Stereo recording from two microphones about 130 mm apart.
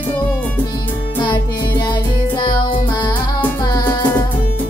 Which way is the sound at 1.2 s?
35° left (ahead or behind).